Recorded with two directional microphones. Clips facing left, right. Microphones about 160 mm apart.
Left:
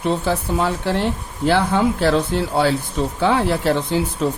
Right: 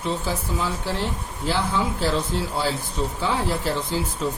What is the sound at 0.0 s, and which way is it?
Speech, 65° left (ahead or behind).